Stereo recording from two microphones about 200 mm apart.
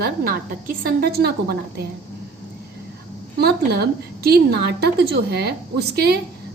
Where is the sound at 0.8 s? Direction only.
50° right (ahead or behind).